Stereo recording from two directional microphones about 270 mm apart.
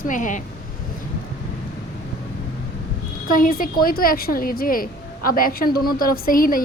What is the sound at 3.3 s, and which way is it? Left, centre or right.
A woman's voice, left.